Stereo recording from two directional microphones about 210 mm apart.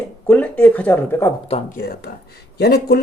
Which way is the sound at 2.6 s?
50° left (ahead or behind).